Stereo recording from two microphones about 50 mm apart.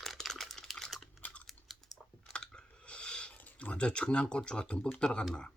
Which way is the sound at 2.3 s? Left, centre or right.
Centre.